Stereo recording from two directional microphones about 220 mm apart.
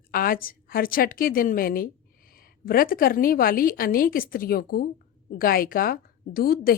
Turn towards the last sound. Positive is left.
turn(degrees=40)  # may be behind; listen again after turning